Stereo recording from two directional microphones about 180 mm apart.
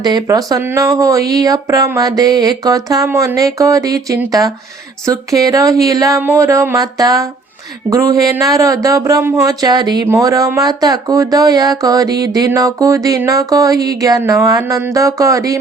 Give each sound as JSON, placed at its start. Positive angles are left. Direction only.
{"t": 0.0, "sound": "speech", "side_deg": -20}